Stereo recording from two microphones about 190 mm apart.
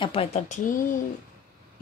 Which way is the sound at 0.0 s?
30° left (ahead or behind).